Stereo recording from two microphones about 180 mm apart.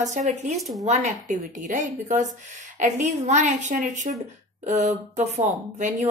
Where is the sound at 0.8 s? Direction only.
40° right (ahead or behind).